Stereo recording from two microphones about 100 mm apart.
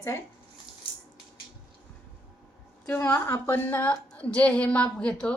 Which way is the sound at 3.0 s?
25° left (ahead or behind).